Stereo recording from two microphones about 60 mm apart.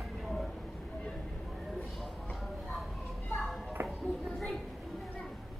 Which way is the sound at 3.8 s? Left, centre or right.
Right.